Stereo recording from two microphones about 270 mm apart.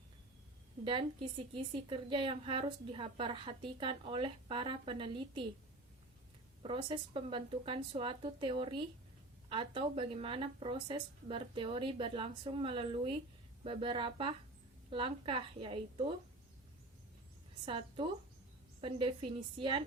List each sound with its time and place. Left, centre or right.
0.9 s a woman's voice: centre
6.6 s a woman's voice: centre
17.7 s a woman's voice: centre